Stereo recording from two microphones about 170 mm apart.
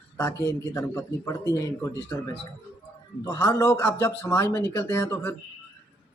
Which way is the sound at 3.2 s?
20° left (ahead or behind).